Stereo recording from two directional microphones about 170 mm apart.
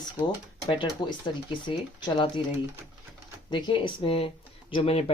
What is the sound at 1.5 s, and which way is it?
Speech, 30° left (ahead or behind).